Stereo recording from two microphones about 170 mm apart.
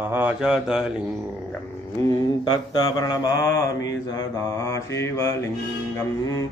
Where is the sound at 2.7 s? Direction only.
25° left (ahead or behind).